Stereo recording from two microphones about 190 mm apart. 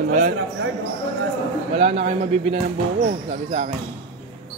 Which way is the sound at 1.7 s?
35° right (ahead or behind).